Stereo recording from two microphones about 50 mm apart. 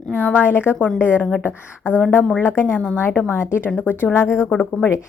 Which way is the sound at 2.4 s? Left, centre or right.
Left.